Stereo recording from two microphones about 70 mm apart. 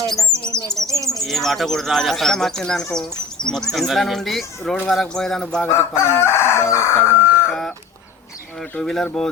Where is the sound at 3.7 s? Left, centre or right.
Centre.